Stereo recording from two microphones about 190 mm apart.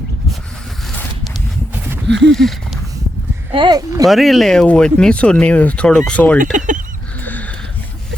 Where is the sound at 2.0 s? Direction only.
70° right (ahead or behind).